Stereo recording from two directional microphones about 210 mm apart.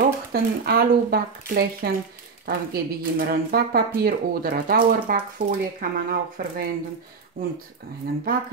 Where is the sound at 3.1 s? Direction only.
45° right (ahead or behind).